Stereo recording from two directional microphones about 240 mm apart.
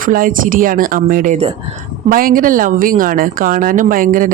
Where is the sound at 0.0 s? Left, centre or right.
Right.